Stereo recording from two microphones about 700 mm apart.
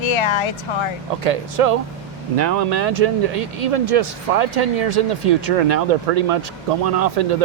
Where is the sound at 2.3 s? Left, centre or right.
Right.